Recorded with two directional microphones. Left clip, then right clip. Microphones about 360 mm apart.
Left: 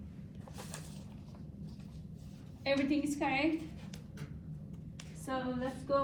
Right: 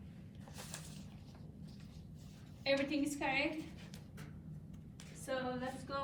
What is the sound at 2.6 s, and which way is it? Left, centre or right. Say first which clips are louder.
Speech: left 3 dB; centre.